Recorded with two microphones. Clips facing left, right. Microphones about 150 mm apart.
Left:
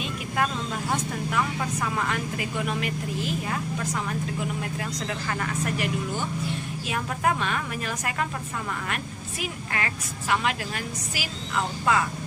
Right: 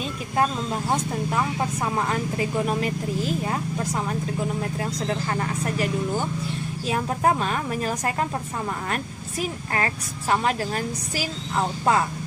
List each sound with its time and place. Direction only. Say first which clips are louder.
0.4 s speech: right 4 dB; 30° right (ahead or behind)